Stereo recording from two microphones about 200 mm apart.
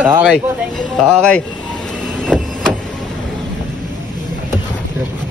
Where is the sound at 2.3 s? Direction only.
5° left (ahead or behind).